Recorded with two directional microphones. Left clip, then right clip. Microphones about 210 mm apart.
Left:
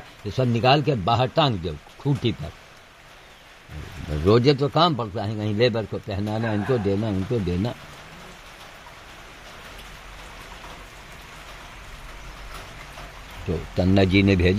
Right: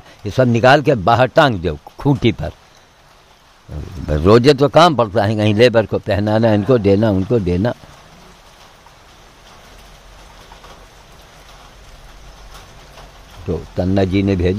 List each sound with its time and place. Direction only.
0.3 s a man's voice: 40° right (ahead or behind)
4.3 s a man's voice: 45° right (ahead or behind)
13.7 s speech: 5° right (ahead or behind)